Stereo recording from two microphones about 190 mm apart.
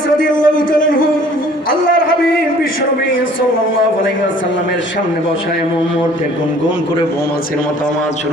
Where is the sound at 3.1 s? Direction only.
90° left.